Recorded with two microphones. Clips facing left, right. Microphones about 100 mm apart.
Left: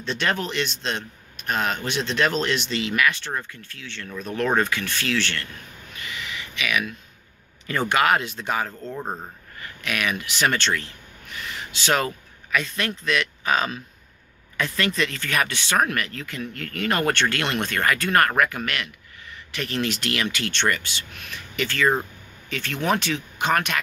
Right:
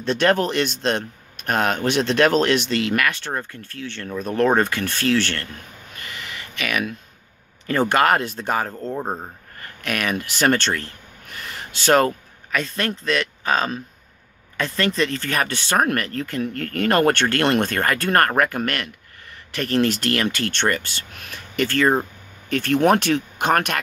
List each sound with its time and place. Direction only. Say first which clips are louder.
0.0 s speech: right 7 dB; 50° right (ahead or behind)
5.9 s a sound: left 1 dB; 45° right (ahead or behind)
7.6 s speech: right 3 dB; 40° right (ahead or behind)